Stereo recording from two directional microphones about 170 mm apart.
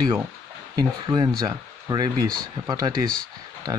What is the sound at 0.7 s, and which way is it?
Speech, 25° right (ahead or behind).